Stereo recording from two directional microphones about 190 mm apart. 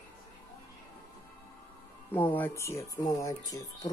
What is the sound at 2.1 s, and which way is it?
Speech, 10° left (ahead or behind).